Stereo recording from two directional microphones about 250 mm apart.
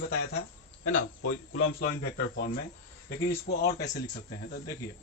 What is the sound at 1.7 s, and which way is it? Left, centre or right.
Speech, left.